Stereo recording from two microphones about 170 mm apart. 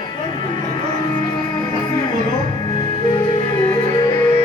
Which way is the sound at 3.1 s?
25° left (ahead or behind).